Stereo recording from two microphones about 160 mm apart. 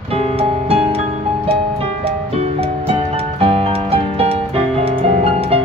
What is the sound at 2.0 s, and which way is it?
Music, 40° right (ahead or behind).